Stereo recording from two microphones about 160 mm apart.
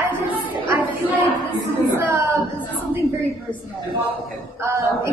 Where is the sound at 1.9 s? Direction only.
15° right (ahead or behind).